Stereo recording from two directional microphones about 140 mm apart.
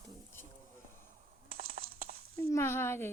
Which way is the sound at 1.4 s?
90° right.